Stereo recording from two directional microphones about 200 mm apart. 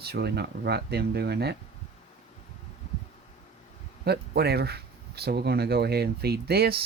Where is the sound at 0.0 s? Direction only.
55° right (ahead or behind).